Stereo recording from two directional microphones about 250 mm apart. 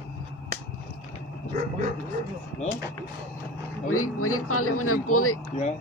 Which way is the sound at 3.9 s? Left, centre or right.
Left.